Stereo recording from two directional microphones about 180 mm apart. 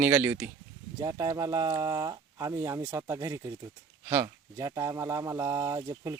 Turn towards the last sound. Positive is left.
turn(degrees=-20)  # may be behind; listen again after turning